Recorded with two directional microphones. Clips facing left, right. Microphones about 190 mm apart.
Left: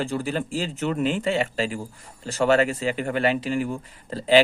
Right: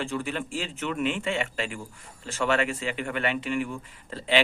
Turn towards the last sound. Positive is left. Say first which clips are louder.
# left 7 dB
turn(degrees=40)  # may be behind; listen again after turning